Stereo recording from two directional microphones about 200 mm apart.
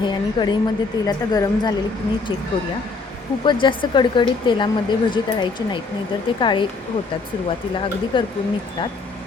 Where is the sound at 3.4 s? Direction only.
25° left (ahead or behind).